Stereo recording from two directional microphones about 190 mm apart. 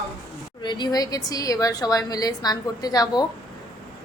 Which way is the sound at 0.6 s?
25° left (ahead or behind).